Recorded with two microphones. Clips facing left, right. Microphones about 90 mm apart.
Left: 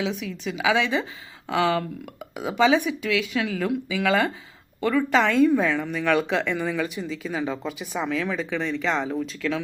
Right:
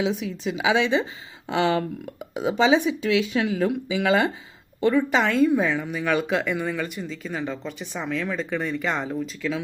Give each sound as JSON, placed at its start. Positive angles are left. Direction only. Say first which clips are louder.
{"t": 0.0, "sound": "a woman's voice", "louder": "right 3 dB", "side_deg": -35}
{"t": 5.1, "sound": "a woman's voice", "louder": "left 1 dB", "side_deg": -5}